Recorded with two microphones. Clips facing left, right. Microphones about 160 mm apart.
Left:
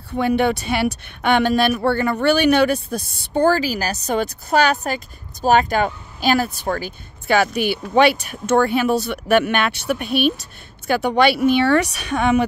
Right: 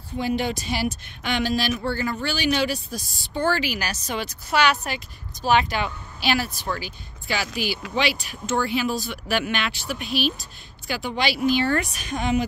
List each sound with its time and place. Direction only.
0.4 s speech: 60° left (ahead or behind)
3.3 s speech: 40° left (ahead or behind); by 12.4 s 65° left (ahead or behind)